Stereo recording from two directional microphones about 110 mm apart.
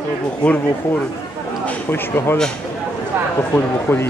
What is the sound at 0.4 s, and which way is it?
Speech, 10° left (ahead or behind).